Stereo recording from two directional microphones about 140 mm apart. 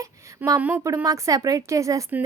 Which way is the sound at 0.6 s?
10° right (ahead or behind).